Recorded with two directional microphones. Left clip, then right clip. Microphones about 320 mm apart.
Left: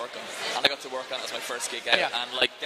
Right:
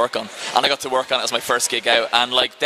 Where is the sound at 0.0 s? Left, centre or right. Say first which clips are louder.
Right 11 dB; right.